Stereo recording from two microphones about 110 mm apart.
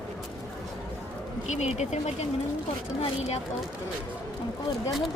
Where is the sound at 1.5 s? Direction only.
90° left.